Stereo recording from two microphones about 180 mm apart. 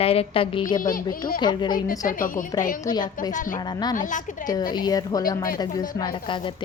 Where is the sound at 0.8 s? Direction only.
50° left (ahead or behind).